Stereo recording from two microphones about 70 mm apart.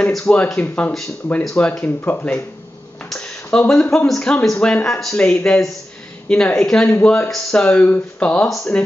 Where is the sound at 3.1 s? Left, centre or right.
Centre.